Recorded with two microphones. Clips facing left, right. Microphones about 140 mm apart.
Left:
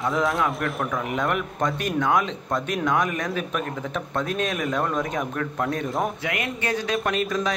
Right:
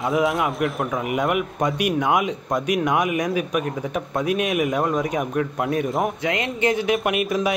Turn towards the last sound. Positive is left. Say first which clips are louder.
# right 3 dB
turn(degrees=-15)  # may be behind; listen again after turning